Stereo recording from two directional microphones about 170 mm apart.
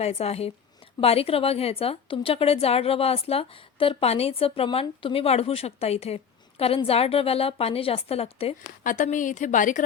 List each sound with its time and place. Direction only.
0.0 s a woman's voice: 40° left (ahead or behind)
8.8 s a woman's voice: 50° left (ahead or behind)